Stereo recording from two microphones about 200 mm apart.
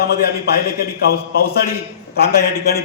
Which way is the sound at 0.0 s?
50° left (ahead or behind).